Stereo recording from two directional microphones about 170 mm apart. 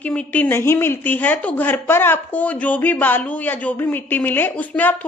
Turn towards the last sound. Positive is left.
turn(degrees=10)  # may be behind; listen again after turning